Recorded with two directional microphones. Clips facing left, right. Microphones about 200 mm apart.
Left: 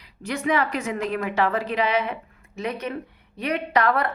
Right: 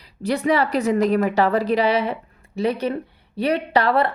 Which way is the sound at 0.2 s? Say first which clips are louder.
Right 4 dB; 35° right (ahead or behind).